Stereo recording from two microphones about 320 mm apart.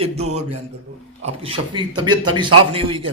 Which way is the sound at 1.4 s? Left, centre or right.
Centre.